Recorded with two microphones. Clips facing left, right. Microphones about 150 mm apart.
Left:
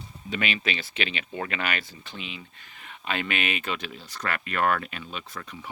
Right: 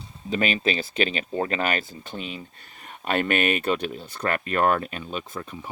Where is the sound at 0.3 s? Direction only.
40° right (ahead or behind).